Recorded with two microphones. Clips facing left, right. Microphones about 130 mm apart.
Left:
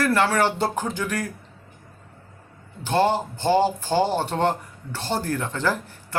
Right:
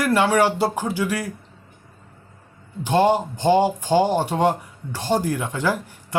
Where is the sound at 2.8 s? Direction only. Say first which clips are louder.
Right 3 dB; 15° right (ahead or behind).